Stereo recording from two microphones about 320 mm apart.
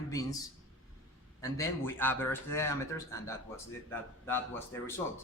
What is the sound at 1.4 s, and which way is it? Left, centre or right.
Speech, centre.